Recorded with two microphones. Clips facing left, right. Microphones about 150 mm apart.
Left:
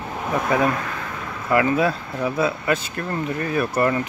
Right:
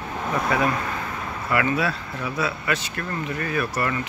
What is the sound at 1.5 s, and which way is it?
Speech, 30° left (ahead or behind).